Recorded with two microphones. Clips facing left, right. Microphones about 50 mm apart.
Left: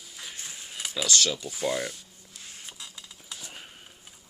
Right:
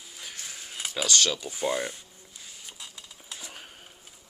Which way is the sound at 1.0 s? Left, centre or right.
Right.